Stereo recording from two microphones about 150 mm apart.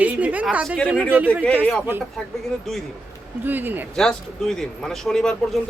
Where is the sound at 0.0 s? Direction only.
10° right (ahead or behind).